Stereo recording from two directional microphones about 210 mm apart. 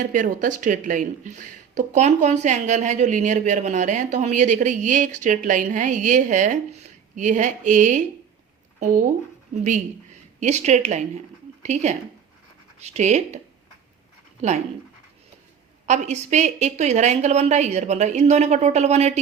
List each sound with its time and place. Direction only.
0.1 s speech: 40° right (ahead or behind)
10.4 s speech: 35° right (ahead or behind)
15.9 s speech: 35° right (ahead or behind)